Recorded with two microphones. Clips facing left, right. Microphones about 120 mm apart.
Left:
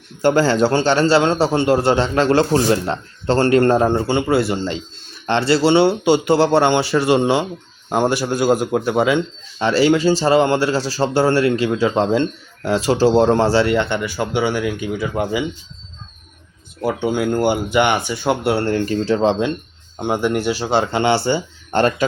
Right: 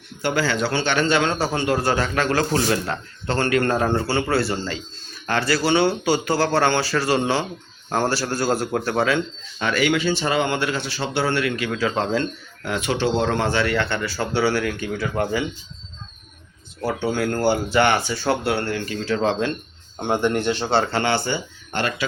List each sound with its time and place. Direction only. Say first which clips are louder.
0.2 s a man's voice: left 8 dB; 45° left (ahead or behind); by 15.4 s 10° left (ahead or behind)
16.8 s speech: left 4 dB; 15° left (ahead or behind)
18.5 s a man's voice: left 6 dB; 35° left (ahead or behind)
19.2 s a man's voice: left 2 dB; 20° left (ahead or behind)
20.0 s speech: left 2 dB; 5° left (ahead or behind); by 21.4 s 25° left (ahead or behind)
21.7 s a man's voice: left 8 dB; 40° left (ahead or behind)